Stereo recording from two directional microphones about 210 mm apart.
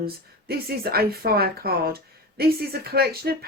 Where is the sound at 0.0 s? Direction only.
45° right (ahead or behind).